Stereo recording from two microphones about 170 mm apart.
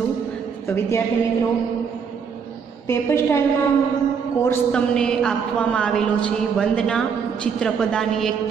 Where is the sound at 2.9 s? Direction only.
15° left (ahead or behind).